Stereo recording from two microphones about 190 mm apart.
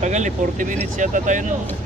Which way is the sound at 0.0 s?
40° right (ahead or behind).